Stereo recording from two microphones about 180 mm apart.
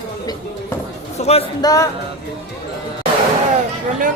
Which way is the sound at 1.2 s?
35° left (ahead or behind).